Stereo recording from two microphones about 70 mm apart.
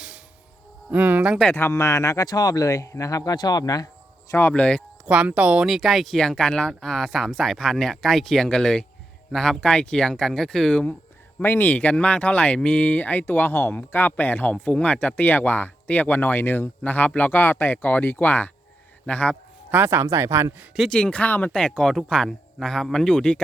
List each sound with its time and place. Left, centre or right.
0.9 s speech: right
1.5 s speech: left
2.2 s speech: left
3.3 s speech: left
4.3 s speech: left
4.5 s speech: centre
5.0 s speech: centre
5.6 s speech: centre
11.4 s speech: left
19.7 s speech: right
20.9 s speech: centre
21.5 s speech: centre